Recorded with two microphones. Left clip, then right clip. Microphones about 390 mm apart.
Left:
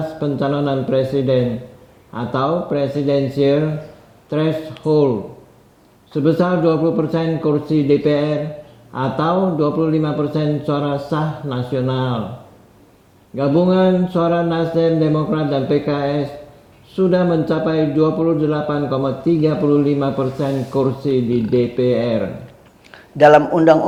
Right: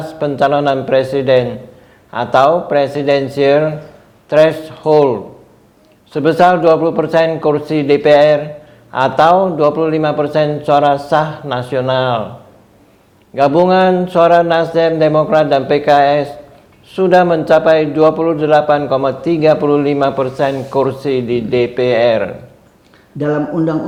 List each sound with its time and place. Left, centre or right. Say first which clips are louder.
0.2 s a man's voice: right 9 dB; right
6.1 s a man's voice: right 7 dB; right
13.3 s a man's voice: right 6 dB; right
23.1 s a man's voice: left 7 dB; left